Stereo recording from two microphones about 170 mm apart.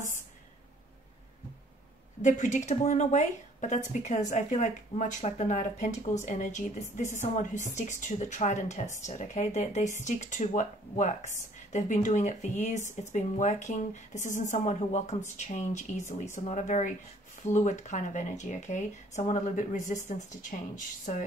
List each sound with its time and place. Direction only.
2.2 s speech: 45° left (ahead or behind)